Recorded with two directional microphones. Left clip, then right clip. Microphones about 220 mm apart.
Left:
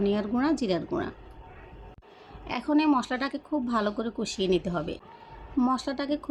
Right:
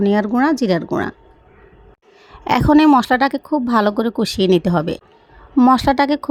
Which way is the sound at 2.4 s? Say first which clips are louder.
Right 13 dB; 40° right (ahead or behind).